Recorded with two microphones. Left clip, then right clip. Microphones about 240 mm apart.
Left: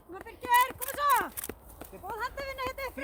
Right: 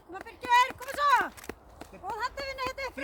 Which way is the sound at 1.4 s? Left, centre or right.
Centre.